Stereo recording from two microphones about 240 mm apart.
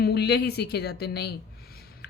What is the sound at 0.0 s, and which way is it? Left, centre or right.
Speech, left.